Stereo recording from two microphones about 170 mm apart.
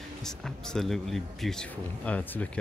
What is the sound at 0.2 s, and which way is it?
Speech, 5° left (ahead or behind).